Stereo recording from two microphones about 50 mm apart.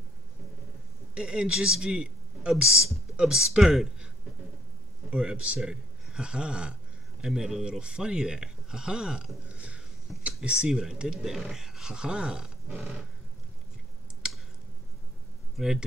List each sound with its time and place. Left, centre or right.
1.1 s speech: centre
2.5 s speech: centre
5.1 s speech: centre
9.5 s a sound: right
10.4 s speech: centre
15.5 s speech: centre